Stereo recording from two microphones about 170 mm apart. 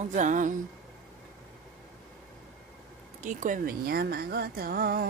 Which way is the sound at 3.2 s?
50° right (ahead or behind).